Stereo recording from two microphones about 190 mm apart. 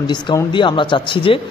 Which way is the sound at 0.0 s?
20° left (ahead or behind).